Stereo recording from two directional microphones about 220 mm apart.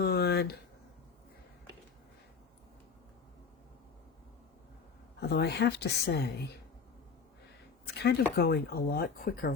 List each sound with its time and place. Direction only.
0.0 s a sound: 45° left (ahead or behind)
5.2 s speech: 50° left (ahead or behind)
7.9 s speech: 50° left (ahead or behind)